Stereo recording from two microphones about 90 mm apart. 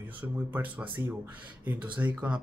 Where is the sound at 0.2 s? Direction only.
20° right (ahead or behind).